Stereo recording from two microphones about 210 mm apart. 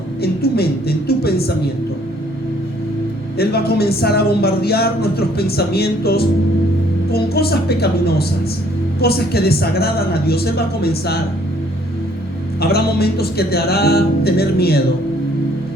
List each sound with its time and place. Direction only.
0.2 s a woman's voice: 50° left (ahead or behind)
3.3 s speech: 50° left (ahead or behind)
12.5 s speech: 50° left (ahead or behind)